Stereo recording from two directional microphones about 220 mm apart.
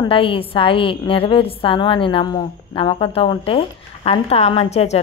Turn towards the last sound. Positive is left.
turn(degrees=30)  # may be behind; listen again after turning